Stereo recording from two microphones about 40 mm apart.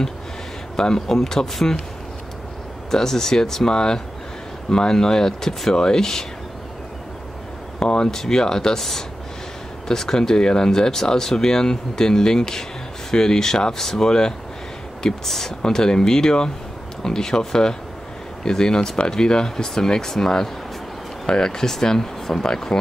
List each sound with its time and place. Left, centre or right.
0.7 s speech: centre
2.9 s speech: centre
7.8 s speech: centre
9.8 s speech: centre